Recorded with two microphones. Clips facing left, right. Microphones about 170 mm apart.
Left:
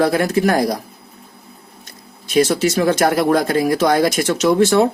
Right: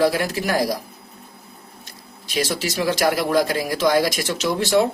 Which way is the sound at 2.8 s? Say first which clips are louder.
Left 3 dB; 50° left (ahead or behind).